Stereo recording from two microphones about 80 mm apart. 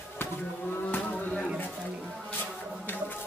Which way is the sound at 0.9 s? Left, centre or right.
Centre.